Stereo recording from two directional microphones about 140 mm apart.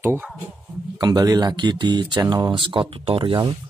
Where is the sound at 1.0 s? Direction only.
30° right (ahead or behind).